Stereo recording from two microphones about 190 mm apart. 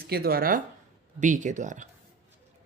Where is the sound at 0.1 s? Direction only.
50° right (ahead or behind).